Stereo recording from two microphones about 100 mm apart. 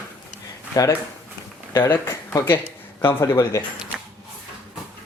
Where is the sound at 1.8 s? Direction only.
25° left (ahead or behind).